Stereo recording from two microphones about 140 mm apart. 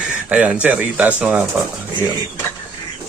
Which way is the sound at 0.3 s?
10° right (ahead or behind).